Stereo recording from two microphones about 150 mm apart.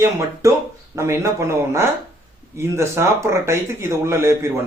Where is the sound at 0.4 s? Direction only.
20° right (ahead or behind).